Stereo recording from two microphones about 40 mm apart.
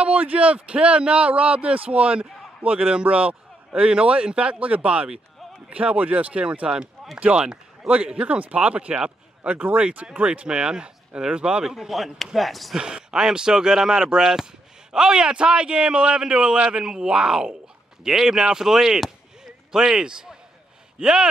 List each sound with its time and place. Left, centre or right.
0.0 s a man's voice: right
6.6 s speech: right
7.0 s a sound: centre
7.3 s speech: right
7.9 s speech: right
9.4 s speech: right
9.8 s speech: right
11.3 s speech: right
11.6 s speech: centre
12.7 s speech: centre
16.8 s speech: centre